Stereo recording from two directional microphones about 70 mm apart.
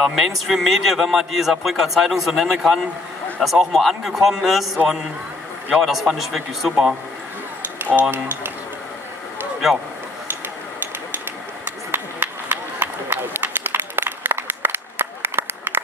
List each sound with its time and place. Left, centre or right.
0.0 s speech: centre
5.8 s speech: centre
7.8 s speech: right
11.9 s run: right